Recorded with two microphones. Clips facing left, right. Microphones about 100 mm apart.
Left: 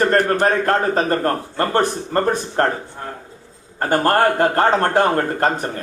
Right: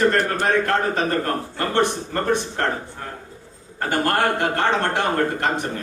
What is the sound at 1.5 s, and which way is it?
A man's voice, 40° left (ahead or behind).